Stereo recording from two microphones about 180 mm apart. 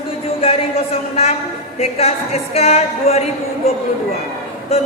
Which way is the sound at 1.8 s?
35° left (ahead or behind).